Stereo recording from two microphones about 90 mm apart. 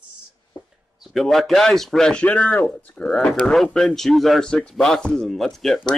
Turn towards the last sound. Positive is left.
turn(degrees=5)  # may be behind; listen again after turning